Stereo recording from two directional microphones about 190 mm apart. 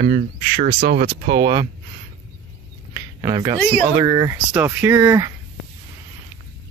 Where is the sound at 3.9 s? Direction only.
20° right (ahead or behind).